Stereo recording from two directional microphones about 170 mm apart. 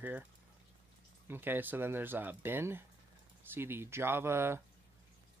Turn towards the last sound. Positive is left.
turn(degrees=-15)  # may be behind; listen again after turning